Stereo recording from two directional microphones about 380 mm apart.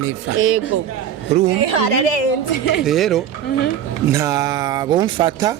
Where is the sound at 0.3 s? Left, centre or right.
Right.